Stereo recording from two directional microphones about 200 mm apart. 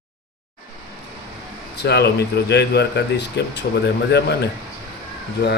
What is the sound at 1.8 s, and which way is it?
Speech, 55° left (ahead or behind).